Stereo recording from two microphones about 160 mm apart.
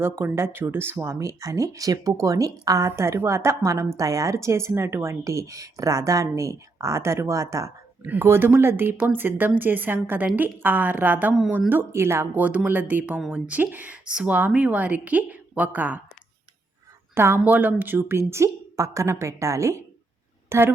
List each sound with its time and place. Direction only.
0.0 s a woman's voice: 15° right (ahead or behind)
17.2 s a woman's voice: 15° right (ahead or behind)